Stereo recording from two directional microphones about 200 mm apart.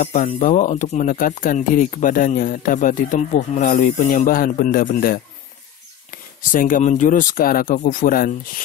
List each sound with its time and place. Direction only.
0.0 s speech: 40° left (ahead or behind)
6.5 s speech: 40° left (ahead or behind)